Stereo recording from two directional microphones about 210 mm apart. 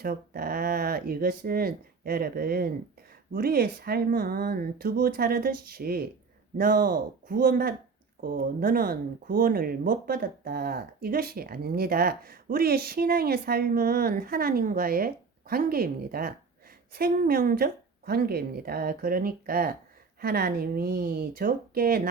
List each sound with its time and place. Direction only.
0.0 s speech: 45° right (ahead or behind)